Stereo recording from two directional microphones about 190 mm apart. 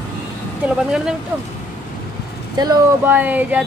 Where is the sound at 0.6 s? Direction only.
5° right (ahead or behind).